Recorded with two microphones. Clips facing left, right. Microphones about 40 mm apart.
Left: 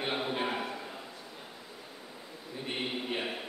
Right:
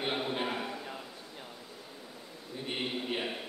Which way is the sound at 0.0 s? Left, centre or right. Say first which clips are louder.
Left 1 dB; centre.